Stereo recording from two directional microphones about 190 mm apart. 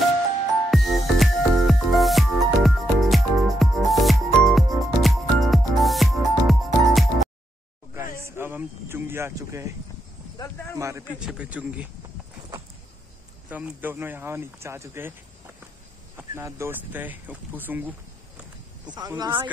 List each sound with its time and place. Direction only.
0.7 s music: centre (ahead or behind)
8.4 s speech: 10° right (ahead or behind)
10.3 s speech: 15° left (ahead or behind)
10.8 s speech: 15° right (ahead or behind)
11.1 s speech: 5° right (ahead or behind)
13.5 s speech: 10° right (ahead or behind)
16.2 s speech: 15° right (ahead or behind)
18.9 s speech: 20° right (ahead or behind)